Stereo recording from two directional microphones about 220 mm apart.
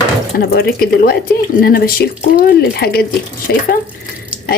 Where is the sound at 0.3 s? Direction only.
45° left (ahead or behind).